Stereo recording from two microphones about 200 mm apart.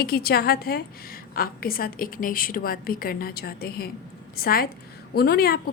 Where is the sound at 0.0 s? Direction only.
50° left (ahead or behind).